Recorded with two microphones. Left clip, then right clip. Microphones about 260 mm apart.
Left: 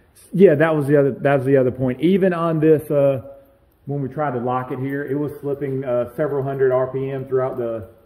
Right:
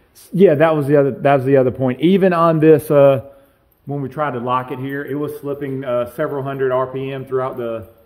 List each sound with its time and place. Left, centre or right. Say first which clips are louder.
0.4 s a man's voice: right 2 dB; centre; by 3.2 s right
4.0 s speech: right 1 dB; centre